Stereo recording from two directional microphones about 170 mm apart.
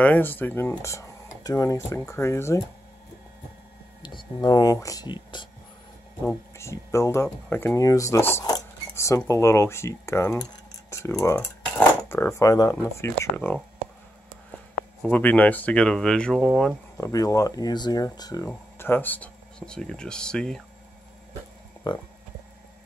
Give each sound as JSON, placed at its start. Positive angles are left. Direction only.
{"t": 0.0, "sound": "speech", "side_deg": 10}
{"t": 4.0, "sound": "speech", "side_deg": 25}
{"t": 6.2, "sound": "speech", "side_deg": 15}
{"t": 15.0, "sound": "speech", "side_deg": 10}
{"t": 16.9, "sound": "speech", "side_deg": 20}
{"t": 21.8, "sound": "speech", "side_deg": 30}